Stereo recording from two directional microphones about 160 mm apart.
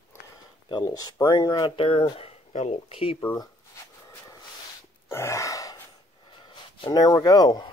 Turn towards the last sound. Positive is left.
turn(degrees=25)  # may be behind; listen again after turning